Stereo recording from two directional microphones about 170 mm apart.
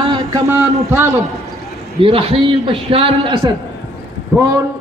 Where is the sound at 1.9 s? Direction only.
30° right (ahead or behind).